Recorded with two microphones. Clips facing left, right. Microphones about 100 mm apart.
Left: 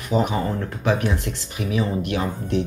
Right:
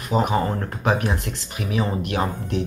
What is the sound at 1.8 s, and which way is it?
Speech, 45° right (ahead or behind).